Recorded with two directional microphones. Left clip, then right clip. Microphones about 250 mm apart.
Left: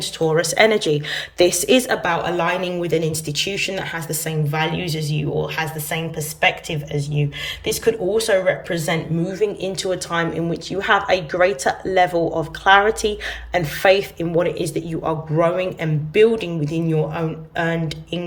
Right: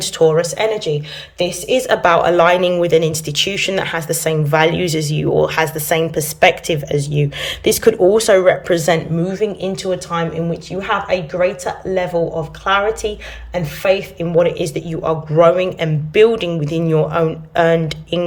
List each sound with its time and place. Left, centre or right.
0.0 s speech: centre
0.3 s speech: centre
1.9 s speech: centre
9.2 s speech: centre